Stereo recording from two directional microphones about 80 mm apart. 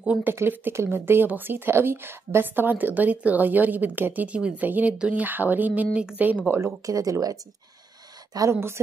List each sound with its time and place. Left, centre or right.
0.0 s speech: centre
0.3 s speech: right
6.9 s speech: right
8.5 s a woman's voice: right